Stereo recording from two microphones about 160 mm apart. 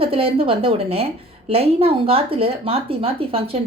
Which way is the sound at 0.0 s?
35° right (ahead or behind).